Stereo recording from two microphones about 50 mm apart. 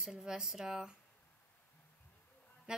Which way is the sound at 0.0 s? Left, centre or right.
Centre.